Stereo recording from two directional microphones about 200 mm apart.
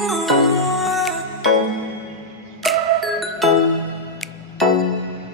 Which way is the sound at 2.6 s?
Centre (ahead or behind).